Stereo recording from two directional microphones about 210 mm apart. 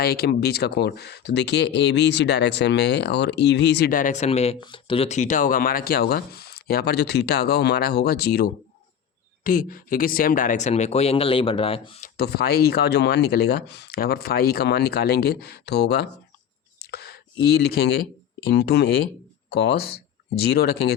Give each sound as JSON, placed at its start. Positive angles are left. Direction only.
{"t": 0.0, "sound": "speech", "side_deg": 50}
{"t": 12.0, "sound": "speech", "side_deg": 50}
{"t": 16.8, "sound": "a sound", "side_deg": 50}
{"t": 18.4, "sound": "speech", "side_deg": 50}